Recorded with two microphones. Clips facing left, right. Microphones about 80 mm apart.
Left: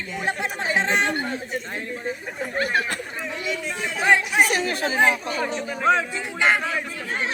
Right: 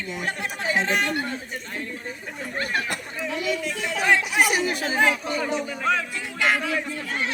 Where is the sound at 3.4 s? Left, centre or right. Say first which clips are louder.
Right 1 dB; left.